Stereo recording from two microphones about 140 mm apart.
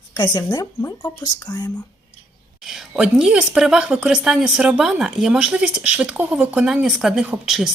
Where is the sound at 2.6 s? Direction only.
5° right (ahead or behind).